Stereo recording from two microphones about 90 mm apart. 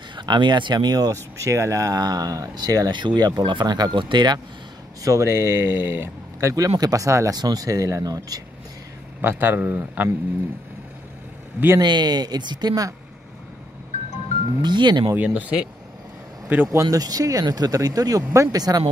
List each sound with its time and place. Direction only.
0.1 s speech: 60° right (ahead or behind)
2.9 s speech: 60° right (ahead or behind)
5.0 s speech: 35° right (ahead or behind)
9.2 s speech: 20° right (ahead or behind)
11.8 s speech: 55° right (ahead or behind)
14.6 s speech: 55° right (ahead or behind)
15.1 s speech: 15° right (ahead or behind)
16.9 s speech: 40° right (ahead or behind)